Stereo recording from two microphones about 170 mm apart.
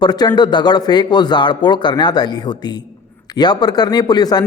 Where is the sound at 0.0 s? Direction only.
25° left (ahead or behind).